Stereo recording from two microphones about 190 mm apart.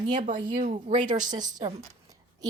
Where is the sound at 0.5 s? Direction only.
40° right (ahead or behind).